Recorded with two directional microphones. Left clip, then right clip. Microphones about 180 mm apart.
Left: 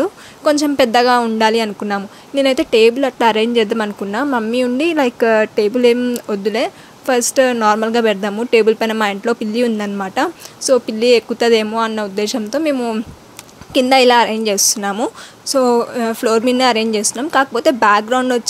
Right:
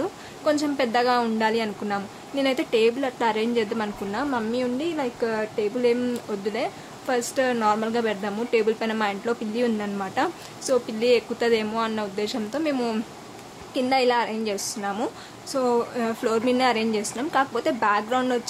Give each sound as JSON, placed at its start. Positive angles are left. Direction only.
{"t": 0.0, "sound": "a woman's voice", "side_deg": 35}
{"t": 13.7, "sound": "a woman's voice", "side_deg": 45}